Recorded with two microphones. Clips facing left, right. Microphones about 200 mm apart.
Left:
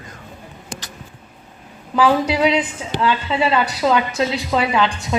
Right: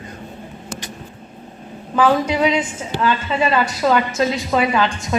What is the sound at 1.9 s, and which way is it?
A woman's voice, 10° left (ahead or behind).